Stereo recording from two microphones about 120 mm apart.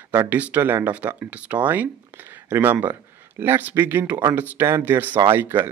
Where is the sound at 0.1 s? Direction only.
15° right (ahead or behind).